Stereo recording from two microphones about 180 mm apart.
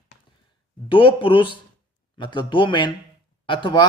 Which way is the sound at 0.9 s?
30° left (ahead or behind).